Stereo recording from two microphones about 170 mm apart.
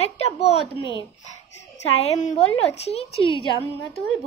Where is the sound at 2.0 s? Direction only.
40° left (ahead or behind).